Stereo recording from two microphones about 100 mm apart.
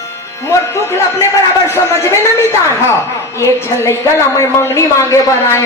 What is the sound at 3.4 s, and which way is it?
A man's voice, 25° left (ahead or behind).